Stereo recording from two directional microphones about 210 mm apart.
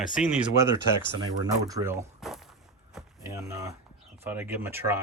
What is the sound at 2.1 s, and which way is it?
Walk, centre (ahead or behind).